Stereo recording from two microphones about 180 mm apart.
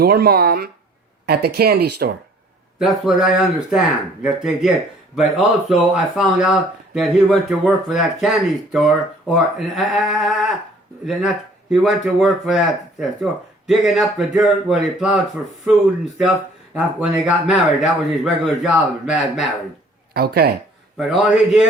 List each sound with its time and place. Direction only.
0.0 s speech: 60° right (ahead or behind)
2.7 s speech: centre (ahead or behind)
16.7 s speech: 5° right (ahead or behind)
20.1 s speech: 60° right (ahead or behind)
20.9 s speech: centre (ahead or behind)